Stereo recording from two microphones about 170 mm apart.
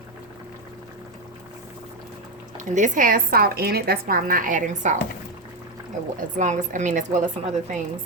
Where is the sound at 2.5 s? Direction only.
45° right (ahead or behind).